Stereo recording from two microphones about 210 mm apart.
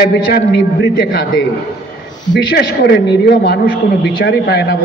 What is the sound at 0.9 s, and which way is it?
Speech, 55° left (ahead or behind).